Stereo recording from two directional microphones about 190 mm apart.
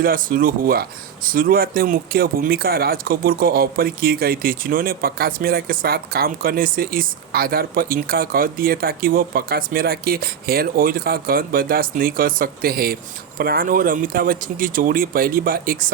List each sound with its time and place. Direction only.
0.0 s speech: 50° right (ahead or behind)